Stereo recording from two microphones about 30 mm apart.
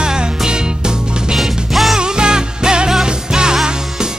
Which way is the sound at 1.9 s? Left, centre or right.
Right.